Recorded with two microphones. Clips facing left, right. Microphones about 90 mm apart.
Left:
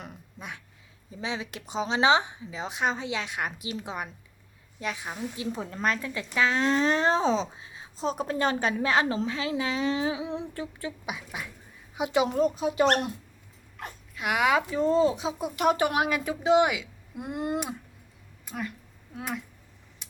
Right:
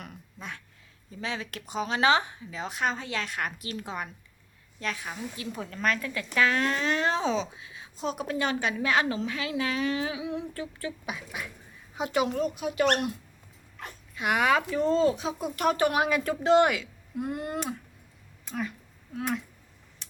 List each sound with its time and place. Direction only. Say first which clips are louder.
0.0 s a sound: even; 15° left (ahead or behind)
1.1 s speech: left 1 dB; 15° left (ahead or behind)
12.3 s speech: left 4 dB; 35° left (ahead or behind)
14.2 s speech: even; 10° left (ahead or behind)
17.2 s speech: left 3 dB; 20° left (ahead or behind)
18.4 s speech: right 2 dB; 10° left (ahead or behind)
19.1 s a sound: right 4 dB; 5° left (ahead or behind)